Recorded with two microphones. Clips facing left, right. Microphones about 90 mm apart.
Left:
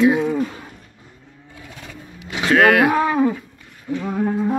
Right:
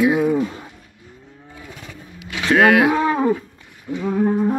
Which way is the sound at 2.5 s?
20° right (ahead or behind).